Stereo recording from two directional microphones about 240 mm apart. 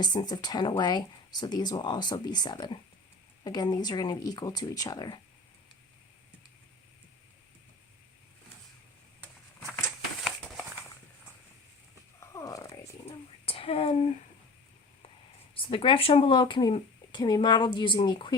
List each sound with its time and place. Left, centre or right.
0.0 s speech: centre
9.2 s a sound: centre
12.3 s purr: centre
13.1 s whispering: left
15.5 s speech: left